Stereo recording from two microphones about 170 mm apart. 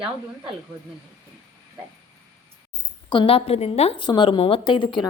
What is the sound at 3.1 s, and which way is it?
A woman's voice, 30° left (ahead or behind).